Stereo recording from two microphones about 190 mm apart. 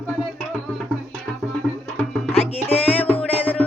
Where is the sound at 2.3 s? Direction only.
30° left (ahead or behind).